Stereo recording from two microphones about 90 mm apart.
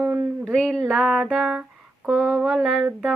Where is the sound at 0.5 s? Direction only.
5° left (ahead or behind).